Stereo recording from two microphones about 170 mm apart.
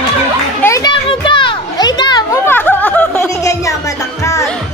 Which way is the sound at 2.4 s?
10° left (ahead or behind).